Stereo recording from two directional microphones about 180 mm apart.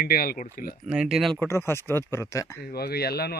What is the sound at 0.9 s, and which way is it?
Speech, 5° right (ahead or behind).